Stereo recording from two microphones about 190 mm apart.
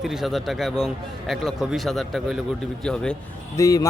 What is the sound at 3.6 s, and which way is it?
Speech, 15° left (ahead or behind).